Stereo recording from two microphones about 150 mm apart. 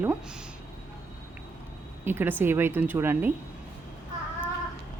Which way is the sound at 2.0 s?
15° right (ahead or behind).